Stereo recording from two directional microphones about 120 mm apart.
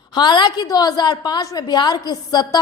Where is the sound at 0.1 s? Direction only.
40° left (ahead or behind).